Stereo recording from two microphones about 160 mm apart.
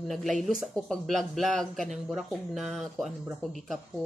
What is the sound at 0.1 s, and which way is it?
Speech, centre (ahead or behind).